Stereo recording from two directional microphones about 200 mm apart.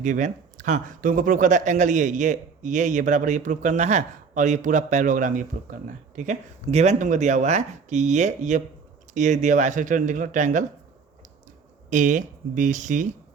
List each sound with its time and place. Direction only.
0.0 s speech: 40° right (ahead or behind)
11.9 s speech: 40° right (ahead or behind)